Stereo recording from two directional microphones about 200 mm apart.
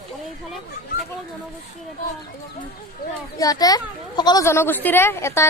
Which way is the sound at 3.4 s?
20° left (ahead or behind).